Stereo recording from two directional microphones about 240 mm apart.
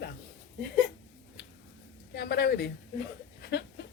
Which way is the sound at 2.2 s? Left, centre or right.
Left.